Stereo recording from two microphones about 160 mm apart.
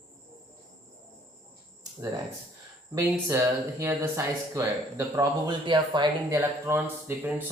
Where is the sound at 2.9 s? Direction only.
15° right (ahead or behind).